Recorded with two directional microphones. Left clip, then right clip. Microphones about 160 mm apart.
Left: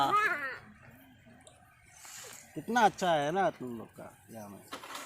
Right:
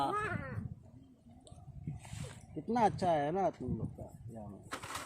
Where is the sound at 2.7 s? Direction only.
15° left (ahead or behind).